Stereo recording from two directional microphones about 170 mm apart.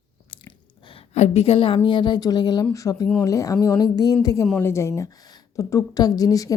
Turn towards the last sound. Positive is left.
turn(degrees=20)  # may be behind; listen again after turning